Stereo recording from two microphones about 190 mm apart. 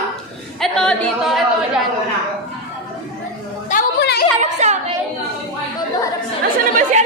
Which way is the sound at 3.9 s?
60° left (ahead or behind).